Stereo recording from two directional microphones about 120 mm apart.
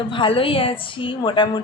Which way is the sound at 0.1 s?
45° left (ahead or behind).